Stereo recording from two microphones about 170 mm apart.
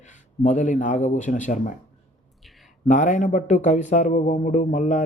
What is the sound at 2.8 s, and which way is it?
Speech, 45° left (ahead or behind).